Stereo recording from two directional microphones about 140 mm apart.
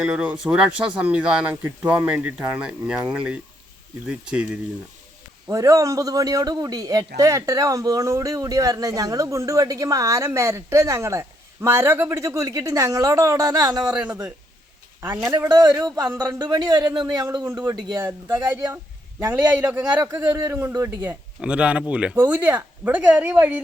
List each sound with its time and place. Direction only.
0.0 s speech: 5° right (ahead or behind)
5.5 s a man's voice: 25° right (ahead or behind)
13.9 s speech: 10° right (ahead or behind)
15.4 s a man's voice: 30° right (ahead or behind)
18.0 s speech: 15° right (ahead or behind)
20.7 s a man's voice: 25° right (ahead or behind)
21.4 s speech: 10° right (ahead or behind)